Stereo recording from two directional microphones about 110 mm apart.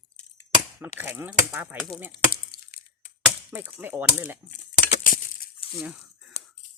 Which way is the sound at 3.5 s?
15° right (ahead or behind).